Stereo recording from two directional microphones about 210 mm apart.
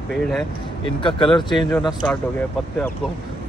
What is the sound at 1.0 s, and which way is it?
Speech, 25° left (ahead or behind).